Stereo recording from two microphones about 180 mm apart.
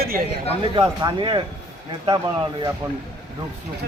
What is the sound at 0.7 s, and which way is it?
A man's voice, 25° right (ahead or behind).